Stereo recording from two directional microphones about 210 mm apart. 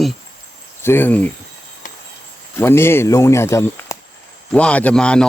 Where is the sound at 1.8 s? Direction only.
40° left (ahead or behind).